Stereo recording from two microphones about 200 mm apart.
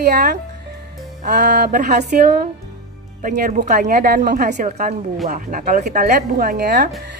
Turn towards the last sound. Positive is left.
turn(degrees=-45)  # may be behind; listen again after turning